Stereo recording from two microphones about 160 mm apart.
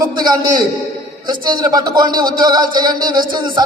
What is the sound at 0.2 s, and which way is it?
A man's voice, 25° right (ahead or behind).